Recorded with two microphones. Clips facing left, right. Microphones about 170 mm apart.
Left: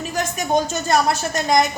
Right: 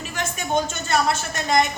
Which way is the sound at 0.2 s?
40° left (ahead or behind).